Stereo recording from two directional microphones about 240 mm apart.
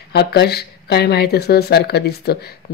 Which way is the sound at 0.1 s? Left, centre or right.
Left.